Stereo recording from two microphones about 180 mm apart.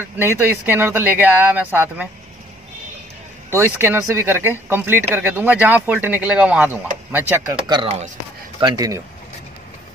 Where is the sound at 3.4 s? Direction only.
15° right (ahead or behind); by 8.1 s 30° right (ahead or behind).